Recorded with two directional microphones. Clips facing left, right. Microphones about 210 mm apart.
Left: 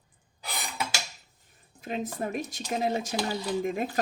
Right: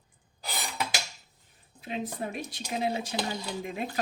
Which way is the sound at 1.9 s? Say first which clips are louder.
Left 2 dB; 45° left (ahead or behind).